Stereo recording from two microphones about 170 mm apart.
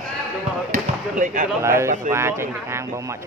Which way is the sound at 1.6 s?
15° right (ahead or behind).